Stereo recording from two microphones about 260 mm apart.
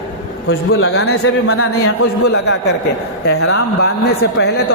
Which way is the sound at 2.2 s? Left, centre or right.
Left.